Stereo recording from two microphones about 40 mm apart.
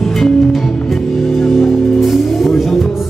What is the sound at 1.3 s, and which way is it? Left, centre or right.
Music, centre.